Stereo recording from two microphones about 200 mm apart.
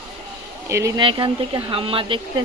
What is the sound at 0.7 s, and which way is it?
Speech, 15° right (ahead or behind).